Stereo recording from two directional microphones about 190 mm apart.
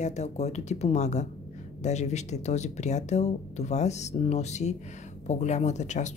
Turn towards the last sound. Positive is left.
turn(degrees=40)  # may be behind; listen again after turning